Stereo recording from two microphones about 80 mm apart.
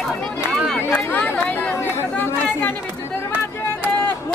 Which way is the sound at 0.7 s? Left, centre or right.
Centre.